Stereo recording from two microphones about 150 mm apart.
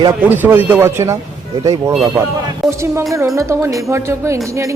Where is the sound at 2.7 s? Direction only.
15° right (ahead or behind).